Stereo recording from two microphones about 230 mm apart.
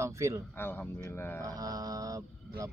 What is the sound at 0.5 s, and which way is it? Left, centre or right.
Speech, centre.